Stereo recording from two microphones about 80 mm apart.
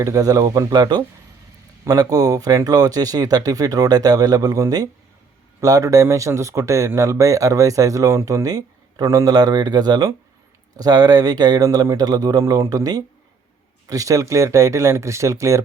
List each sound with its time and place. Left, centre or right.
0.0 s speech: right
0.7 s speech: right
9.3 s speech: right